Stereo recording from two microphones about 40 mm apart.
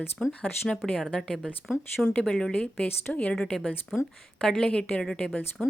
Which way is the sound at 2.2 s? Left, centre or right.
Left.